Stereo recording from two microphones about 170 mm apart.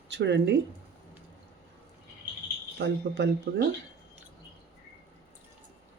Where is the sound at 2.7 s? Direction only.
85° right.